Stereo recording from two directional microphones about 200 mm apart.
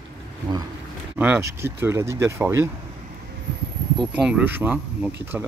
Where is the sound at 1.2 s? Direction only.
10° right (ahead or behind).